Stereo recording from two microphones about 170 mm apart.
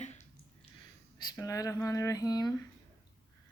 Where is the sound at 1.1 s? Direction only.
20° left (ahead or behind).